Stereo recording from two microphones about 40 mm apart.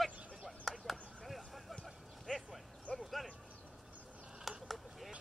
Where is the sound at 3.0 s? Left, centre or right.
Centre.